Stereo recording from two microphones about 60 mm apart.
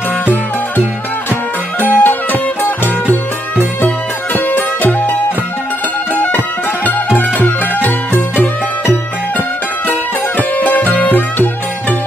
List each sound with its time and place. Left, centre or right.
1.8 s music: left
6.1 s music: left
10.6 s music: left